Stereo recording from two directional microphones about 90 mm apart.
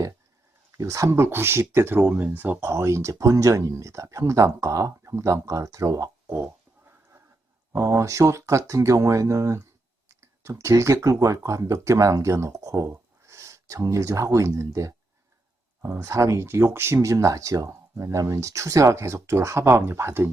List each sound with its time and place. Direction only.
0.8 s speech: 35° right (ahead or behind)
6.4 s a sound: 25° right (ahead or behind)
7.7 s speech: 35° right (ahead or behind)
15.8 s speech: 25° right (ahead or behind)
16.0 s speech: 35° right (ahead or behind)